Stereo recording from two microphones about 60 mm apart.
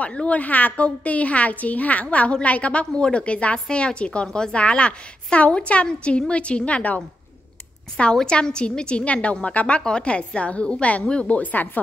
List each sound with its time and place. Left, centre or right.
0.0 s a woman's voice: centre
8.0 s a woman's voice: centre